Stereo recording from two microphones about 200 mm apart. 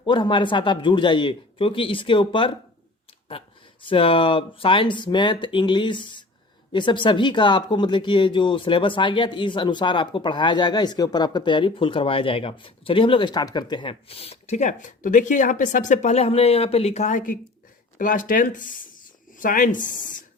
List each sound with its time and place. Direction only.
0.0 s speech: 25° left (ahead or behind)
3.8 s speech: 25° left (ahead or behind)